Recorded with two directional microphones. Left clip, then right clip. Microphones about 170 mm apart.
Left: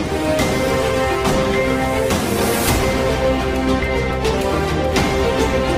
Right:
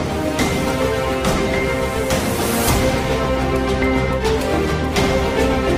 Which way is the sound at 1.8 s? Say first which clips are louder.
Left 1 dB; centre (ahead or behind).